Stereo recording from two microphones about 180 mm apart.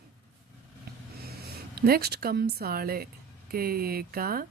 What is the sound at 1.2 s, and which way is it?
A woman's voice, 60° right (ahead or behind).